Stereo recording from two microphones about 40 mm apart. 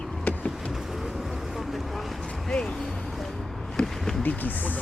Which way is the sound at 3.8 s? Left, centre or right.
Centre.